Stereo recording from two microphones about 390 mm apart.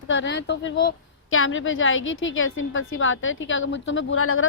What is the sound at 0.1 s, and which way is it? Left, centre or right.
A woman's voice, left.